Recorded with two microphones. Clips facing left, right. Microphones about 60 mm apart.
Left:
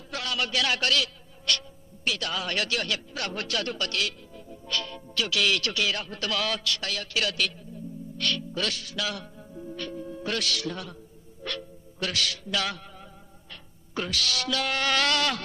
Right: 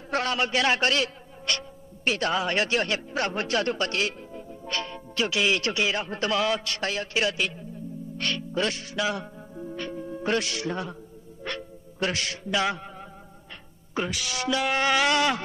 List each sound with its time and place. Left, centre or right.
0.1 s a man's voice: right
8.2 s music: right
11.4 s a man's voice: right
13.9 s speech: centre